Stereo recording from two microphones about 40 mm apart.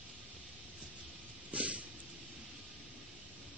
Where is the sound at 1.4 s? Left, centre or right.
Right.